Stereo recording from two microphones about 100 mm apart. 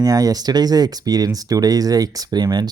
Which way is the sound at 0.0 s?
35° right (ahead or behind).